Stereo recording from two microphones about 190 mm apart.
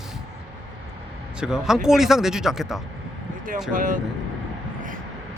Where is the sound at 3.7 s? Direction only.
45° right (ahead or behind).